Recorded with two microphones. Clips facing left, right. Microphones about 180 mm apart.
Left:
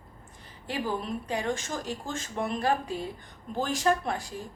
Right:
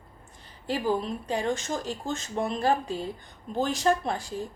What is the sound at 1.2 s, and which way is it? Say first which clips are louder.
A woman's voice: right 2 dB; 30° right (ahead or behind).